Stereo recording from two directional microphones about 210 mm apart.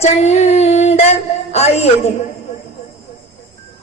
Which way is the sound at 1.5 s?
30° left (ahead or behind).